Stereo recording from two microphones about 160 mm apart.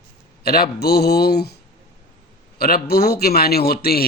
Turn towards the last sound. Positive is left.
turn(degrees=70)  # may be behind; listen again after turning